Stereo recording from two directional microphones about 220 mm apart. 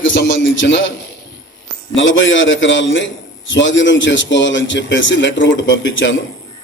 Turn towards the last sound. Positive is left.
turn(degrees=55)  # may be behind; listen again after turning